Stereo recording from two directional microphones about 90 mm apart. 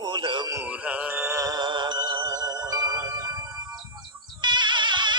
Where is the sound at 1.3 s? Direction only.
40° right (ahead or behind).